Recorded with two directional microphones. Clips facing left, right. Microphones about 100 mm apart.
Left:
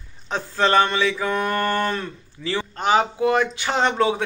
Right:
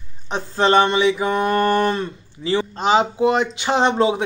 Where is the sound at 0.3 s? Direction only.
20° right (ahead or behind).